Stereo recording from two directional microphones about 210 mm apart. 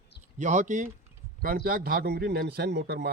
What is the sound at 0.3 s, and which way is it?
A man's voice, 35° right (ahead or behind).